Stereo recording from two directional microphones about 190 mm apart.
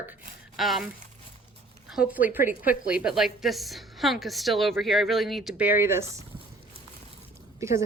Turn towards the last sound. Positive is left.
turn(degrees=-15)  # may be behind; listen again after turning